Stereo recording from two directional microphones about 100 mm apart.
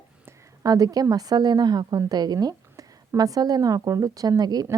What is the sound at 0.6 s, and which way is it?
A woman's voice, 40° right (ahead or behind).